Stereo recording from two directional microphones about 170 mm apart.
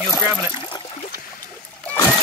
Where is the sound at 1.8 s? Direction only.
10° left (ahead or behind).